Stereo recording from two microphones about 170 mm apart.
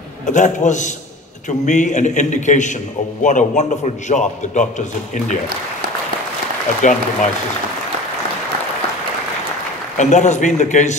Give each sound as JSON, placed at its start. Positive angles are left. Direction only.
{"t": 0.3, "sound": "a man's voice", "side_deg": 45}
{"t": 6.8, "sound": "a man's voice", "side_deg": 45}
{"t": 9.9, "sound": "a man's voice", "side_deg": 45}